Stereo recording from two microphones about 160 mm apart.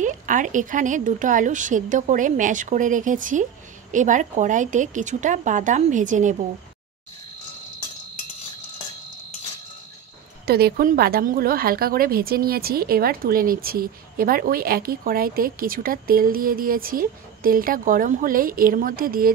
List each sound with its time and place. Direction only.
0.0 s speech: 55° right (ahead or behind)
10.4 s a woman's voice: 75° right (ahead or behind)